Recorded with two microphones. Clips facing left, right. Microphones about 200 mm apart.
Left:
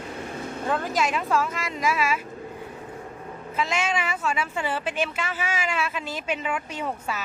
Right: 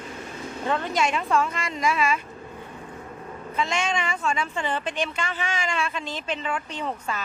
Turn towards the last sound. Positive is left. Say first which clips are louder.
# even
turn(degrees=10)  # may be behind; listen again after turning